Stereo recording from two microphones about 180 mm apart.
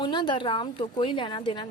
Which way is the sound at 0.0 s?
25° left (ahead or behind).